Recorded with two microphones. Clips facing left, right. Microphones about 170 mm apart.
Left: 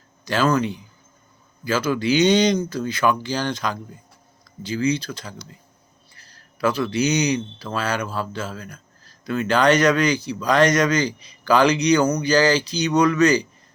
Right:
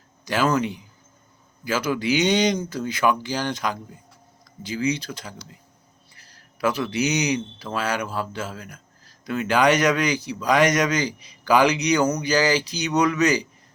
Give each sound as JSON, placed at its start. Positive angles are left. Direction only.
{"t": 0.3, "sound": "a man's voice", "side_deg": -10}